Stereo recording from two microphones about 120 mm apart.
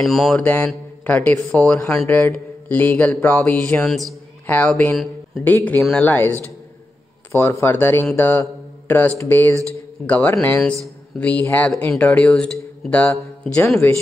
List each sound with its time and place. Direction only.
0.0 s speech: centre (ahead or behind)
5.8 s speech: centre (ahead or behind)
6.0 s speech: 15° left (ahead or behind)
8.1 s mantra: 15° left (ahead or behind)
9.2 s speech: 20° left (ahead or behind)